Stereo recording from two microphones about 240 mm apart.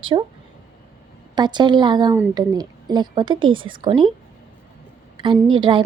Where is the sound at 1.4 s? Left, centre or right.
Centre.